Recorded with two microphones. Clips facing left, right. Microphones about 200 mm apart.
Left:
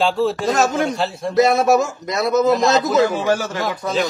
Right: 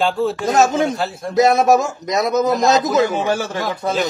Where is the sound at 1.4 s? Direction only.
20° right (ahead or behind).